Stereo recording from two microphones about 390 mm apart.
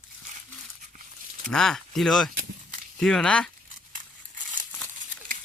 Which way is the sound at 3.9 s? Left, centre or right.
Centre.